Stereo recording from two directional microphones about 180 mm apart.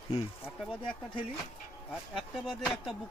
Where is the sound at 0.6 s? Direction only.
5° left (ahead or behind).